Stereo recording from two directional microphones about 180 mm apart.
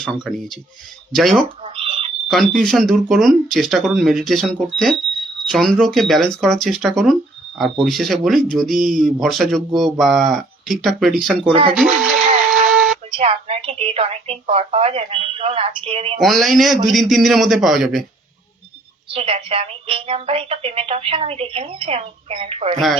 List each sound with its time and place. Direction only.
0.0 s speech: 5° right (ahead or behind)
1.6 s a sound: 30° right (ahead or behind)
2.2 s speech: centre (ahead or behind)
11.9 s a sound: centre (ahead or behind)
13.1 s speech: 30° right (ahead or behind)
16.2 s speech: centre (ahead or behind)
19.1 s speech: 30° right (ahead or behind)